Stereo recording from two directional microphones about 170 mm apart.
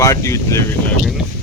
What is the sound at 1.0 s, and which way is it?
Speech, centre (ahead or behind).